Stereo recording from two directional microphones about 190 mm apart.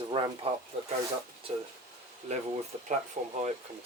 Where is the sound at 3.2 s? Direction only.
35° right (ahead or behind).